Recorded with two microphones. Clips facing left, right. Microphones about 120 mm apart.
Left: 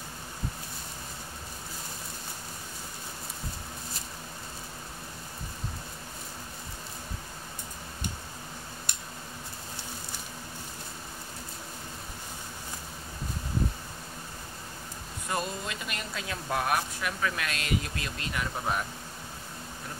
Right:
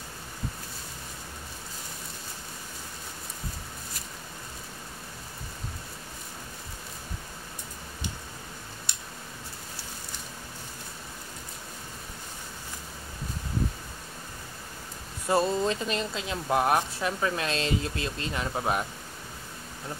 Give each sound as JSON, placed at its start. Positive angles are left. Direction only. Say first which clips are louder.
{"t": 15.2, "sound": "speech", "louder": "right 9 dB", "side_deg": -30}